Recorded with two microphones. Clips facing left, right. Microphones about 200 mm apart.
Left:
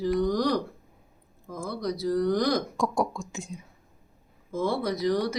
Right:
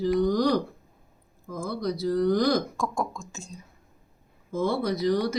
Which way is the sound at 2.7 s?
15° left (ahead or behind).